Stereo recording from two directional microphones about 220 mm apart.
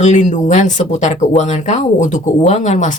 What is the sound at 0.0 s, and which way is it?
Speech, 30° left (ahead or behind).